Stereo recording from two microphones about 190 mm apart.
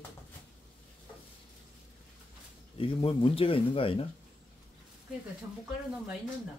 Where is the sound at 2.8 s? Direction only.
30° left (ahead or behind).